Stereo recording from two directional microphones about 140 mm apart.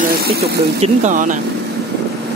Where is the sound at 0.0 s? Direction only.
90° right.